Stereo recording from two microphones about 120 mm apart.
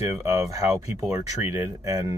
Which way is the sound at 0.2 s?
25° right (ahead or behind).